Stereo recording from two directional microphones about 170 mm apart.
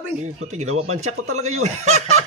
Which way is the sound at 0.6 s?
40° right (ahead or behind).